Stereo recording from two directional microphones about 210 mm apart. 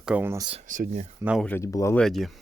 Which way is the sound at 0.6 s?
40° right (ahead or behind).